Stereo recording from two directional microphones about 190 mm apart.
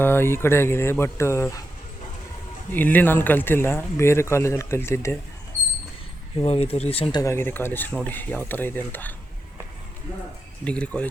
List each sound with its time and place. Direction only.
0.0 s speech: 10° left (ahead or behind)
2.7 s speech: 10° left (ahead or behind)
6.4 s speech: 30° left (ahead or behind)
7.2 s speech: 15° left (ahead or behind)
10.6 s speech: 5° left (ahead or behind)